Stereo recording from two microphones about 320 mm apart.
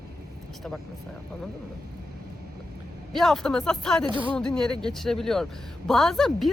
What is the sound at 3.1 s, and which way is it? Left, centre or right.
Speech, centre.